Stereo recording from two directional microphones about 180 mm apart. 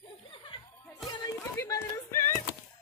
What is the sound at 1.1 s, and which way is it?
Music, 20° left (ahead or behind).